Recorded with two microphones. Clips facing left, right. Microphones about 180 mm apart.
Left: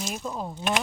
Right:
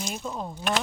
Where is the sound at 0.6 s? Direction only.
20° left (ahead or behind).